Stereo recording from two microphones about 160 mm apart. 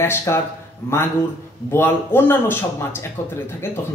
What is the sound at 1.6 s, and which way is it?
A man's voice, 15° left (ahead or behind).